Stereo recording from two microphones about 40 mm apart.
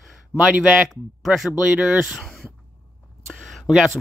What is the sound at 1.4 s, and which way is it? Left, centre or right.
Speech, right.